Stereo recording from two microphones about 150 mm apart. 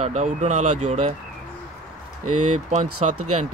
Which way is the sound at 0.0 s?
50° right (ahead or behind).